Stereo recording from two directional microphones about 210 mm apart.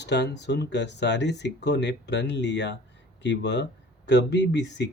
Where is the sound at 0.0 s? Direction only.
55° left (ahead or behind).